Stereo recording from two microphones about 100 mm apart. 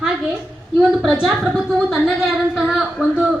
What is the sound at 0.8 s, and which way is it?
Speech, 5° right (ahead or behind).